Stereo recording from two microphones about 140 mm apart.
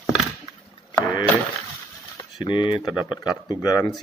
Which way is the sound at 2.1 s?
35° left (ahead or behind).